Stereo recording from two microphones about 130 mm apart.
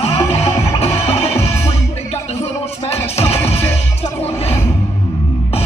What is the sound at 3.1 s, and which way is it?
Music, 50° left (ahead or behind).